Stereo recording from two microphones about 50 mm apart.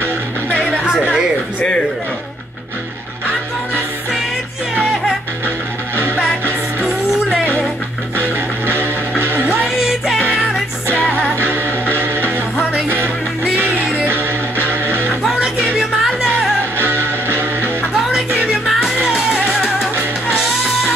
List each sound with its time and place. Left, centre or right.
0.5 s music: left
6.9 s music: centre
8.2 s music: right
9.5 s music: centre
11.0 s music: left
11.3 s music: right
15.2 s music: centre
16.7 s music: right
17.9 s music: centre